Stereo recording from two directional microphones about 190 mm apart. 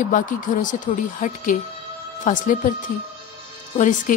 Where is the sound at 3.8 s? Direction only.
40° left (ahead or behind).